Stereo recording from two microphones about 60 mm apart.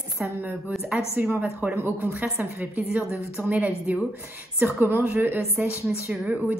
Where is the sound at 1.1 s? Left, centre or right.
Right.